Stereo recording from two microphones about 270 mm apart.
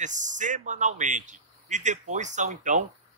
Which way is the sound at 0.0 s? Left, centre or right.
Right.